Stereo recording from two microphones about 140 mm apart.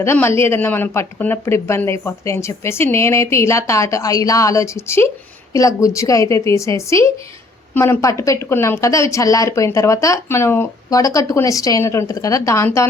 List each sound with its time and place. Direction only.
0.0 s a woman's voice: 15° left (ahead or behind)